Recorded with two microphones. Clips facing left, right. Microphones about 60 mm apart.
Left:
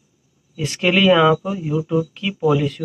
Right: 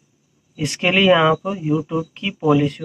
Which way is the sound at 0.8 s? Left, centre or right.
Centre.